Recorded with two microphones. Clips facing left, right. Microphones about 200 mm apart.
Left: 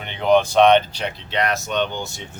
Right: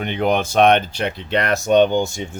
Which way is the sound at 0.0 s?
50° right (ahead or behind).